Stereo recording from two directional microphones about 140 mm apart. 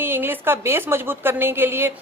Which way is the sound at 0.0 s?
15° right (ahead or behind).